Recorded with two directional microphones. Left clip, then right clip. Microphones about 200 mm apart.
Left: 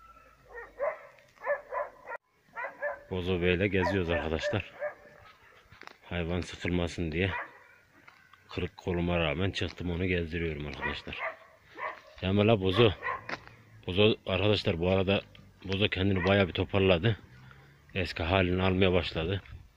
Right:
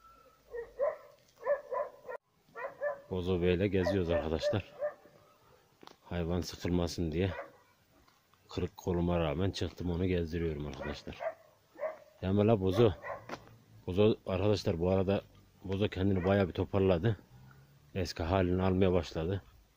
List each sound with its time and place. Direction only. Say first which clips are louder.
1.4 s dog: left 1 dB; 25° right (ahead or behind)
3.1 s speech: left 3 dB; 5° right (ahead or behind)
5.9 s a sound: left 2 dB; 10° right (ahead or behind)
6.5 s speech: left 2 dB; 10° right (ahead or behind)
8.5 s speech: left 2 dB; 10° right (ahead or behind)
12.2 s speech: left 3 dB; centre (ahead or behind)